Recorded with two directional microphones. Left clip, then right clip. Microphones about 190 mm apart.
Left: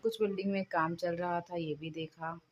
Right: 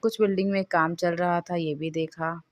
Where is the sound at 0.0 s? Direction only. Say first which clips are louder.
Right 9 dB; 35° right (ahead or behind).